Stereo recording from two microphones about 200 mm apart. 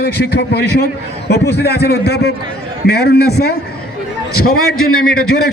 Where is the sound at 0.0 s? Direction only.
55° left (ahead or behind).